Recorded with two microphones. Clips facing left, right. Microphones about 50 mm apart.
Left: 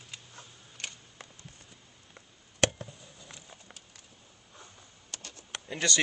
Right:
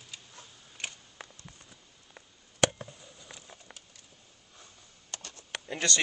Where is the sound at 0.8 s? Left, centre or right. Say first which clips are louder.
Right 2 dB; centre.